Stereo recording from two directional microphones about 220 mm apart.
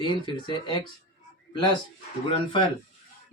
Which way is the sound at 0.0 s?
20° left (ahead or behind).